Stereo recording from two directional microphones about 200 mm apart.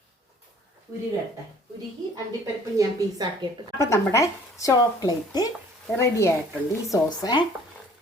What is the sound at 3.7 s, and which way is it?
Speech, 15° left (ahead or behind).